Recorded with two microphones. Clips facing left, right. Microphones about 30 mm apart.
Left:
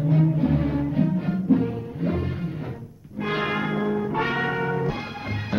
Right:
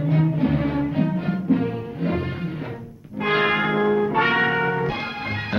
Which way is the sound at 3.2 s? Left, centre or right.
Right.